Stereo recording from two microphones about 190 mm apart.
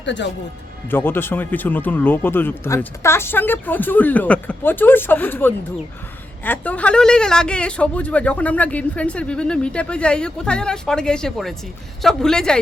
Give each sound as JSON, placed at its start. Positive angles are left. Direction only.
{"t": 0.0, "sound": "speech", "side_deg": 70}
{"t": 0.9, "sound": "speech", "side_deg": 10}